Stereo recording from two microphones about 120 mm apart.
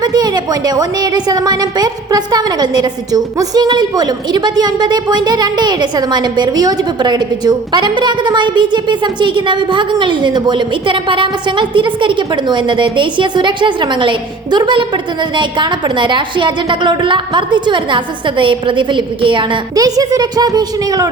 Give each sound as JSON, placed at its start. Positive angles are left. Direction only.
{"t": 0.0, "sound": "a woman's voice", "side_deg": -35}